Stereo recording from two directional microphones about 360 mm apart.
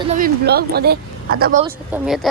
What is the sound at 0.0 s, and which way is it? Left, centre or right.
Speech, right.